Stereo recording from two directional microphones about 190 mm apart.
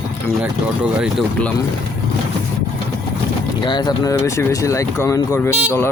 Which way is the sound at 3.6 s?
25° left (ahead or behind).